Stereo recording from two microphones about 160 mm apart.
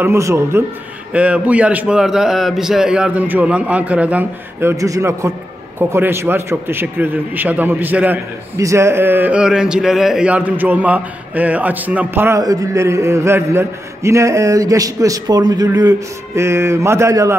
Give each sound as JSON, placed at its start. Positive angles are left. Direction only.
{"t": 0.0, "sound": "a man's voice", "side_deg": -15}